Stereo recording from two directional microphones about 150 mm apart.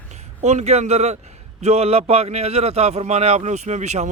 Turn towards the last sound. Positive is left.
turn(degrees=-50)  # may be behind; listen again after turning